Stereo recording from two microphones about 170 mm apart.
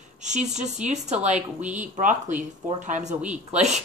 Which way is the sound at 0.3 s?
45° right (ahead or behind).